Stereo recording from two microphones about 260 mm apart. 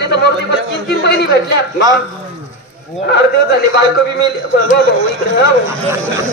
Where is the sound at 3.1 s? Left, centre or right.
Left.